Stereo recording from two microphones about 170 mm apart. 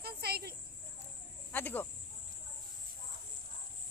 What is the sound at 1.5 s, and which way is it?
Speech, 10° left (ahead or behind).